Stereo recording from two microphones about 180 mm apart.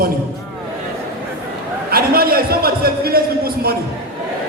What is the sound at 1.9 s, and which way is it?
Speech, 55° right (ahead or behind).